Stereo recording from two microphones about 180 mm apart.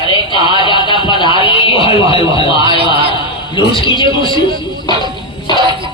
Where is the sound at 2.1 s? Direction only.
30° left (ahead or behind).